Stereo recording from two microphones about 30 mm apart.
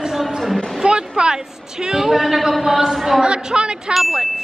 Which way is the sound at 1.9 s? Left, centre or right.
Centre.